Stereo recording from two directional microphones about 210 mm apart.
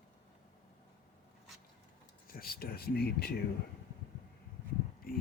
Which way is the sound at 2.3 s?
45° left (ahead or behind).